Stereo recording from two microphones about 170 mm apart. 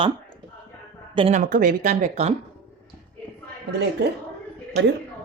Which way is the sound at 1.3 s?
50° right (ahead or behind).